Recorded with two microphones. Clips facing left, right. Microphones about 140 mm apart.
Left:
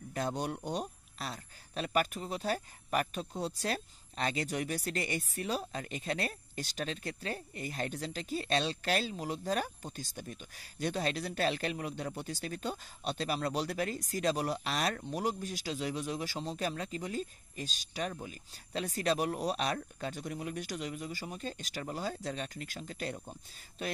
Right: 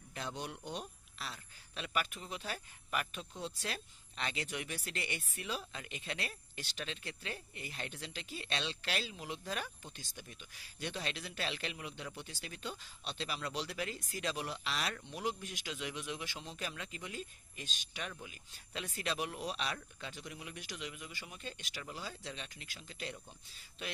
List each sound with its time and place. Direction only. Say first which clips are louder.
0.1 s speech: left 8 dB; 45° left (ahead or behind)